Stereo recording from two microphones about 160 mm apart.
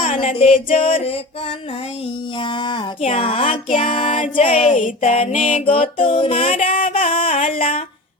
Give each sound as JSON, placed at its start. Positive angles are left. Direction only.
{"t": 0.2, "sound": "music", "side_deg": 35}
{"t": 2.3, "sound": "a sound", "side_deg": 30}
{"t": 3.0, "sound": "music", "side_deg": 40}